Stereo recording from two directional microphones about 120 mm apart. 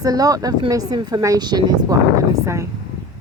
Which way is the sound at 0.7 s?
35° right (ahead or behind).